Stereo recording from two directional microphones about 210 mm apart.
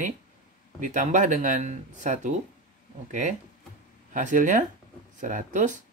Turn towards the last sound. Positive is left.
turn(degrees=-35)  # may be behind; listen again after turning